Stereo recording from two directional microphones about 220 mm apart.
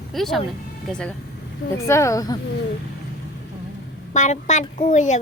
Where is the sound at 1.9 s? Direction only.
15° left (ahead or behind).